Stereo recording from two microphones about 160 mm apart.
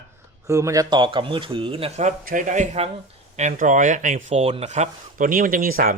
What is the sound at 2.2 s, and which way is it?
A man's voice, 55° right (ahead or behind).